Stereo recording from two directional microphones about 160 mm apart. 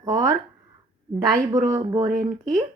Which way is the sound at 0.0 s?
25° right (ahead or behind).